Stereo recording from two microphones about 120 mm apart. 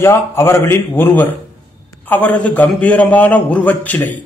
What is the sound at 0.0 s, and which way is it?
A man's voice, 20° left (ahead or behind).